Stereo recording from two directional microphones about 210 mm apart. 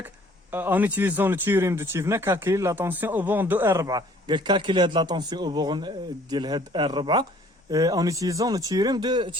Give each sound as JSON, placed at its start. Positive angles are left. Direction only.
{"t": 0.5, "sound": "speech", "side_deg": -10}